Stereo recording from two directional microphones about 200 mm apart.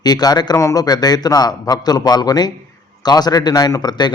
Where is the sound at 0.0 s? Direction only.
20° left (ahead or behind).